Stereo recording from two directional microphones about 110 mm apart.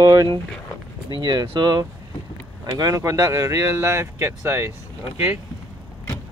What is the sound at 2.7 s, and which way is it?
Speech, 30° right (ahead or behind).